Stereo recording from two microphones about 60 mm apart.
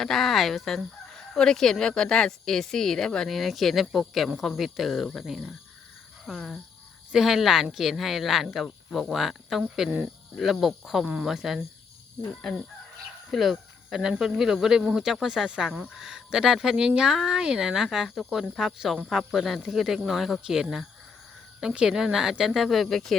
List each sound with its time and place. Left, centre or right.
0.0 s speech: centre
11.0 s speech: right
11.3 s speech: centre
12.3 s speech: centre